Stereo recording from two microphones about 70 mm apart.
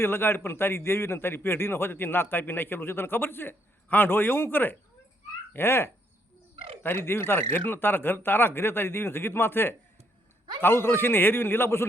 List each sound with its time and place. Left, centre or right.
0.0 s a man's voice: left